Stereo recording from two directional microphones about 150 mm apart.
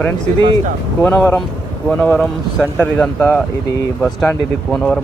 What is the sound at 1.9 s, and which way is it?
Speech, 5° left (ahead or behind).